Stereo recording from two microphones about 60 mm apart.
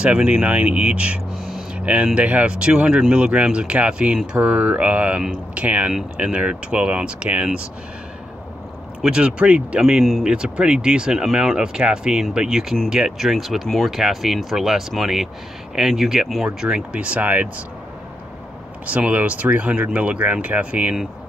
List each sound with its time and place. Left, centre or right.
0.0 s speech: centre
9.0 s speech: centre
9.8 s speech: centre
16.4 s speech: centre
18.9 s speech: right